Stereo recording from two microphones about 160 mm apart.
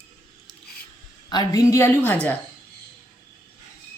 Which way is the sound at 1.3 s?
20° left (ahead or behind).